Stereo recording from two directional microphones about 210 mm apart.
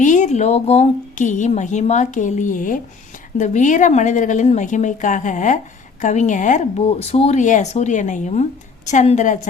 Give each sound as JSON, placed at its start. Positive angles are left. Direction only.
{"t": 0.0, "sound": "a woman's voice", "side_deg": 35}